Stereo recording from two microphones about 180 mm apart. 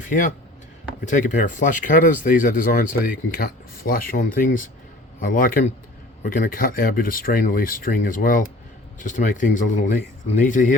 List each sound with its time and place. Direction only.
0.0 s speech: 45° left (ahead or behind)